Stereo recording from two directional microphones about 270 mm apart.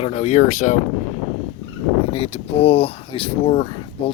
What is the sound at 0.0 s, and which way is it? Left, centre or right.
Speech, left.